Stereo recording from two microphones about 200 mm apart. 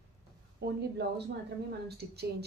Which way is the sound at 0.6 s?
55° right (ahead or behind).